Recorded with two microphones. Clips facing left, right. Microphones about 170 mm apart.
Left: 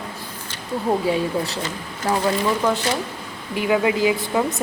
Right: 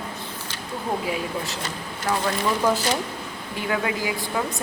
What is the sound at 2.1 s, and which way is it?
Speech, 30° left (ahead or behind).